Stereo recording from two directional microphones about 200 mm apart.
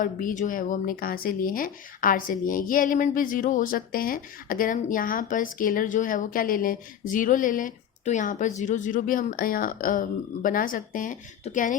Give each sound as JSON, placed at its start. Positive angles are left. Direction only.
{"t": 0.0, "sound": "speech", "side_deg": 40}